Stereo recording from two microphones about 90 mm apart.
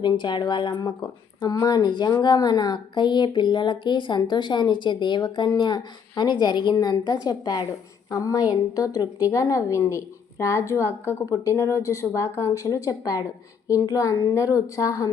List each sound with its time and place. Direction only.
0.0 s a woman's voice: 55° left (ahead or behind); by 15.1 s 40° left (ahead or behind)